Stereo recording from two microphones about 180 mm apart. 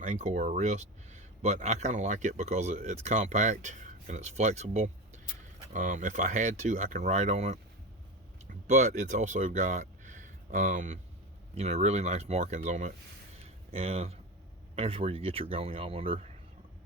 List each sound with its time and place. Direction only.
0.0 s speech: 40° right (ahead or behind)